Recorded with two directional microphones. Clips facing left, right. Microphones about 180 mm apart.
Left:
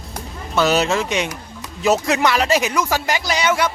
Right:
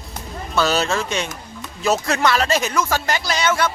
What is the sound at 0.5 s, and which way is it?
Speech, 15° left (ahead or behind).